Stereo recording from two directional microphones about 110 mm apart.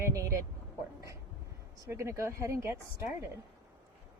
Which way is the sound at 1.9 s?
25° right (ahead or behind).